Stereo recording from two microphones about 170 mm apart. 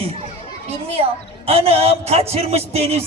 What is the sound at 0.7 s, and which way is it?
Speech, 35° right (ahead or behind).